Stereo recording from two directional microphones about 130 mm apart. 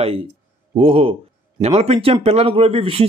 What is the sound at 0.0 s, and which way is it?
Speech, 50° right (ahead or behind).